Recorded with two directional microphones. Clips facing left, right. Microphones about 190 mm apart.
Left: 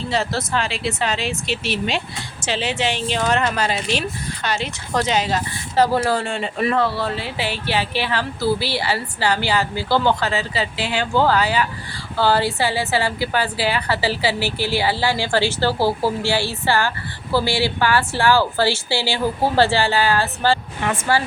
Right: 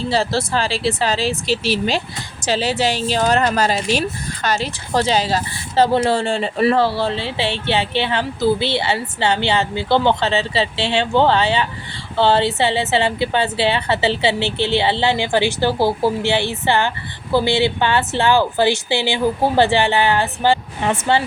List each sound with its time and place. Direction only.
0.1 s a woman's voice: 30° right (ahead or behind)